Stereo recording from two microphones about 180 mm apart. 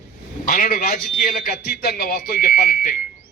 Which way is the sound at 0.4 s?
50° left (ahead or behind).